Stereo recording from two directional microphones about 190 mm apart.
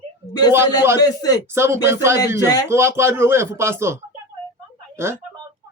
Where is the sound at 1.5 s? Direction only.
15° right (ahead or behind).